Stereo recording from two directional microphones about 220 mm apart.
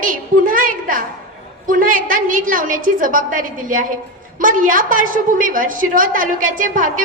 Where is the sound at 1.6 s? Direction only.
40° right (ahead or behind).